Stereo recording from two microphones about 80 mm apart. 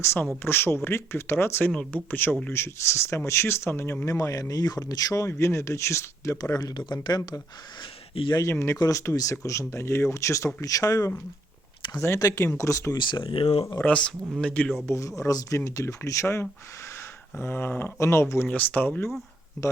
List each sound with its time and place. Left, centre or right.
0.0 s speech: left
1.7 s speech: centre
2.5 s speech: left
4.0 s speech: left
5.3 s speech: left
8.4 s speech: left
12.2 s speech: left
13.0 s speech: left
13.8 s speech: centre
14.8 s speech: left
18.0 s speech: left
18.4 s speech: centre